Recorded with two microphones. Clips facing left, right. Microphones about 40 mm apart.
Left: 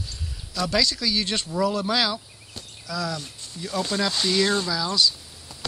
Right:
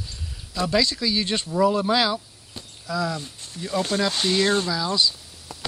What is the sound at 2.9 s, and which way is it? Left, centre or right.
Speech, right.